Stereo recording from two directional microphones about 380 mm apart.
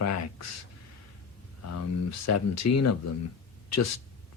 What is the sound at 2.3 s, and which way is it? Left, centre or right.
Speech, left.